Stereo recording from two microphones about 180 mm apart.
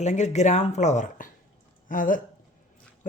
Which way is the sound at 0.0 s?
40° left (ahead or behind).